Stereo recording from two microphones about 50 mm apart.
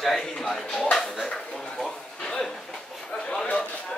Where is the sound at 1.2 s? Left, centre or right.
Centre.